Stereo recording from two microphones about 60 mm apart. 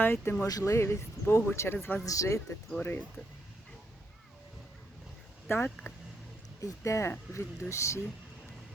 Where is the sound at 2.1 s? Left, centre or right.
Left.